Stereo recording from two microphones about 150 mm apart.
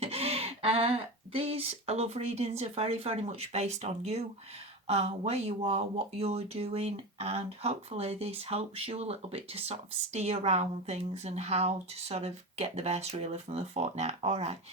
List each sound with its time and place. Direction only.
0.0 s speech: 45° right (ahead or behind)